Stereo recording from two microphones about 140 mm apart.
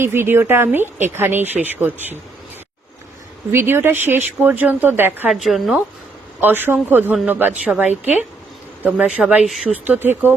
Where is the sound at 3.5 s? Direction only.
15° right (ahead or behind).